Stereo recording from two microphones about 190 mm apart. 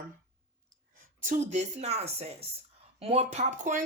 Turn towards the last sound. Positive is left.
turn(degrees=-40)  # may be behind; listen again after turning